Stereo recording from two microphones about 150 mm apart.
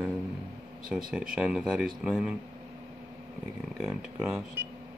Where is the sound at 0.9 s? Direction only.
5° right (ahead or behind).